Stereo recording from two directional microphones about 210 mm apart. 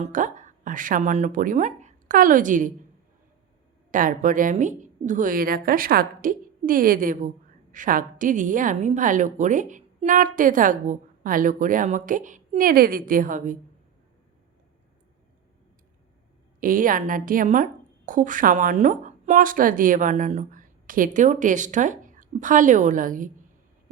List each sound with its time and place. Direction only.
0.0 s speech: 35° right (ahead or behind)
3.9 s a woman's voice: 40° right (ahead or behind)
16.6 s a woman's voice: 40° right (ahead or behind)